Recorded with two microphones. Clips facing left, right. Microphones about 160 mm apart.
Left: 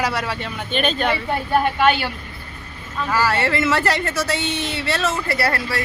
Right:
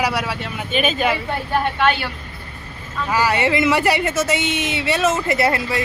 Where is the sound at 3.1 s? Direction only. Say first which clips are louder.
Right 2 dB; 15° right (ahead or behind).